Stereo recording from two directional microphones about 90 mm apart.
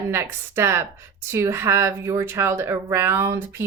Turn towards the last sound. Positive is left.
turn(degrees=-30)  # may be behind; listen again after turning